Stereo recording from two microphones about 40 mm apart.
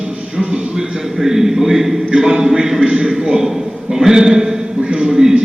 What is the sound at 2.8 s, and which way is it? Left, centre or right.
A man's voice, right.